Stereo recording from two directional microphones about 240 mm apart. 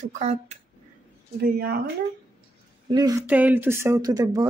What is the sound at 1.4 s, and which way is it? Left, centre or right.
Speech, right.